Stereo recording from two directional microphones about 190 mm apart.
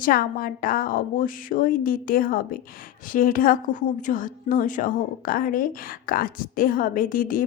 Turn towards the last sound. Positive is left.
turn(degrees=45)  # may be behind; listen again after turning